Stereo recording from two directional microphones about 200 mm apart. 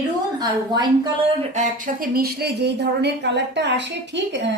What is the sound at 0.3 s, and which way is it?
A woman's voice, 20° right (ahead or behind).